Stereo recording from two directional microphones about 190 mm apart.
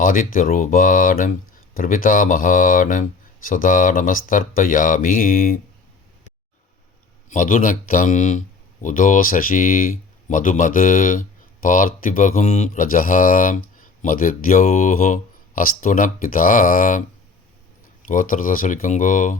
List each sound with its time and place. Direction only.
0.0 s speech: 45° left (ahead or behind)
7.3 s speech: 45° left (ahead or behind)
18.1 s speech: 45° left (ahead or behind)